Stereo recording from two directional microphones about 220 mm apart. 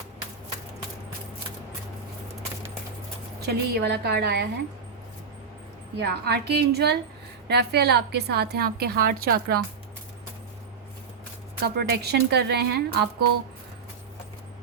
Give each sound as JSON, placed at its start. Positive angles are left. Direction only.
{"t": 3.4, "sound": "a woman's voice", "side_deg": -45}
{"t": 6.0, "sound": "a woman's voice", "side_deg": -50}
{"t": 11.6, "sound": "a woman's voice", "side_deg": -45}